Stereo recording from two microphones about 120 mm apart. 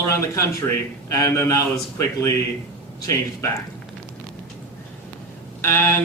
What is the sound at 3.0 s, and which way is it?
Speech, 25° left (ahead or behind).